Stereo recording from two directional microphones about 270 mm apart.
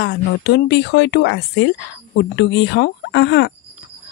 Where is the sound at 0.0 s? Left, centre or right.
Left.